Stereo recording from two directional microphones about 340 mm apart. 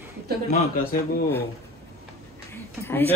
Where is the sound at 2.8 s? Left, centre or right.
Centre.